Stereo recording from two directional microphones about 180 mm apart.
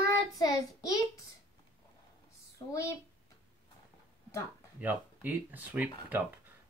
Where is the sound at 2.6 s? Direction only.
25° left (ahead or behind).